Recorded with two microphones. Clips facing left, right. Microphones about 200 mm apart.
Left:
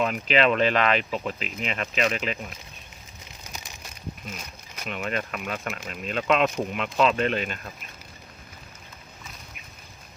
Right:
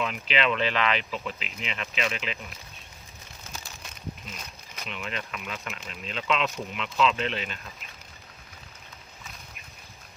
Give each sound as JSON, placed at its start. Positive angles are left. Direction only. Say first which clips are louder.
{"t": 0.0, "sound": "speech", "louder": "left 5 dB", "side_deg": 45}
{"t": 4.9, "sound": "speech", "louder": "left 6 dB", "side_deg": 50}